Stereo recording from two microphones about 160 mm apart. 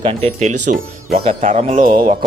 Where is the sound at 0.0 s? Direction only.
40° right (ahead or behind).